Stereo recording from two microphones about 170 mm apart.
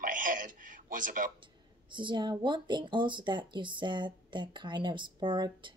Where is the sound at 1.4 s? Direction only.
30° right (ahead or behind).